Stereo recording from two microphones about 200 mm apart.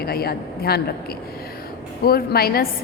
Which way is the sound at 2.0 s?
50° left (ahead or behind).